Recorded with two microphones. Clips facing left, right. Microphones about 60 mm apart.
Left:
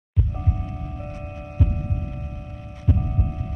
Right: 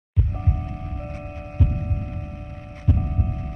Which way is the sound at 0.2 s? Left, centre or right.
Centre.